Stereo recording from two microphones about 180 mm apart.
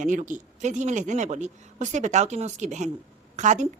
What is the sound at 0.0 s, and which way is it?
Speech, 45° right (ahead or behind).